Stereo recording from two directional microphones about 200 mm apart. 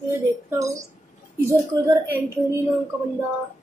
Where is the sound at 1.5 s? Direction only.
15° right (ahead or behind).